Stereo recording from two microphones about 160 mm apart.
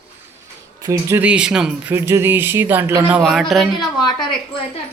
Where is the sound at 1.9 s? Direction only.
15° right (ahead or behind); by 3.7 s centre (ahead or behind).